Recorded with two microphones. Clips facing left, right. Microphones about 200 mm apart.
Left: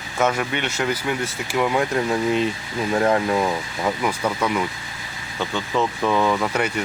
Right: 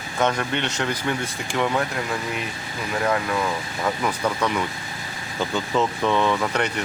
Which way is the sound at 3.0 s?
30° left (ahead or behind).